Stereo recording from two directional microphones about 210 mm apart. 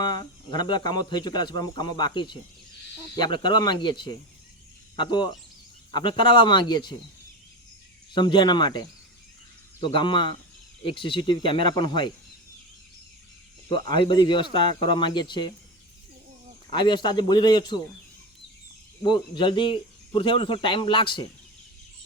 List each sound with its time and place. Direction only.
0.0 s speech: 20° left (ahead or behind)
8.1 s speech: 20° left (ahead or behind)
9.8 s speech: 20° left (ahead or behind)
13.7 s speech: 25° left (ahead or behind)
16.6 s speech: 20° left (ahead or behind)
19.0 s speech: 20° left (ahead or behind)